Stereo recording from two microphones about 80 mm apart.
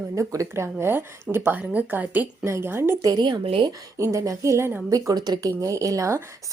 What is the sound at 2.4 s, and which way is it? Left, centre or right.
Speech, right.